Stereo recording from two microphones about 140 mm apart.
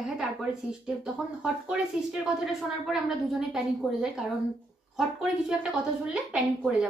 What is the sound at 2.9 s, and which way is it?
Speech, 5° right (ahead or behind).